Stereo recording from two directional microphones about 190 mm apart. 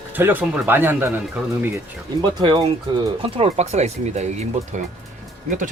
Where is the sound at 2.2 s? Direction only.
25° right (ahead or behind).